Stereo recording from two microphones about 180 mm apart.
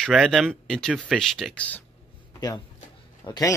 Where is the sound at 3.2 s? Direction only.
25° left (ahead or behind).